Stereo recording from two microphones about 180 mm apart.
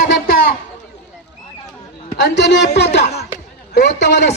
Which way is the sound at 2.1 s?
70° left (ahead or behind).